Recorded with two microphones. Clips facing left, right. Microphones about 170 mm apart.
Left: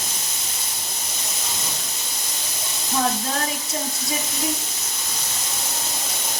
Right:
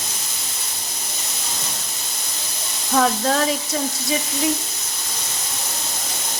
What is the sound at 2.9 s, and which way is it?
Speech, 70° right (ahead or behind).